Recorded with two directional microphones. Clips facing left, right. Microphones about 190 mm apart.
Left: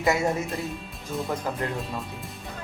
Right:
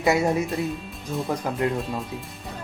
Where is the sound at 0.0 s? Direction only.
20° right (ahead or behind).